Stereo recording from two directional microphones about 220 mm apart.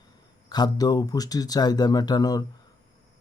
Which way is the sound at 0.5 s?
20° left (ahead or behind).